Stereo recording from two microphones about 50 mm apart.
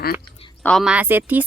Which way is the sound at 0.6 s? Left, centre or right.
Left.